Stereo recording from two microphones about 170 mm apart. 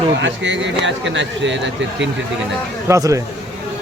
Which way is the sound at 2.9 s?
20° right (ahead or behind).